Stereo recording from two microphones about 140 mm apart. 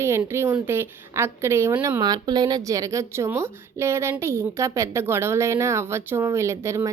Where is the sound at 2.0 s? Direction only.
30° right (ahead or behind).